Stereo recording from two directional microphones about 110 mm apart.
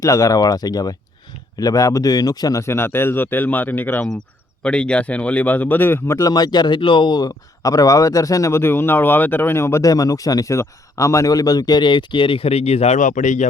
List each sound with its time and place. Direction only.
0.0 s speech: 30° left (ahead or behind)
6.3 s speech: 40° left (ahead or behind); by 13.5 s 90° left